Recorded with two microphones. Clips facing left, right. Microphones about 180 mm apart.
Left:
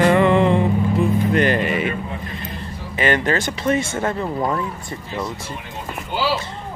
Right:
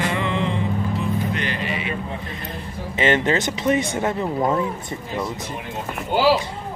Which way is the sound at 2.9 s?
20° right (ahead or behind).